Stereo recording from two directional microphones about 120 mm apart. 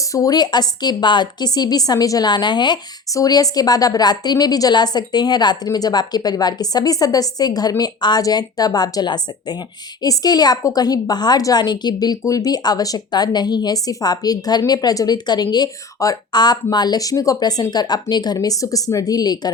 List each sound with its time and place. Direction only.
0.1 s a woman's voice: 30° left (ahead or behind)